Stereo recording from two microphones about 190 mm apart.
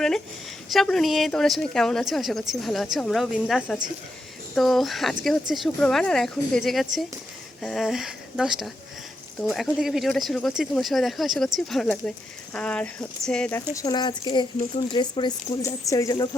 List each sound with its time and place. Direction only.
0.7 s speech: centre (ahead or behind)
13.7 s speech: 20° left (ahead or behind)